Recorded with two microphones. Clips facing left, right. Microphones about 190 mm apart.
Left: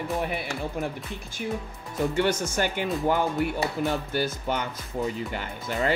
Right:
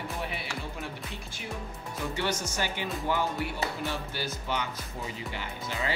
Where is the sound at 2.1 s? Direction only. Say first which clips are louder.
Left 6 dB; 50° left (ahead or behind).